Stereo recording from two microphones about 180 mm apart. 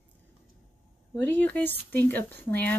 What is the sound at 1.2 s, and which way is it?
Speech, 10° left (ahead or behind).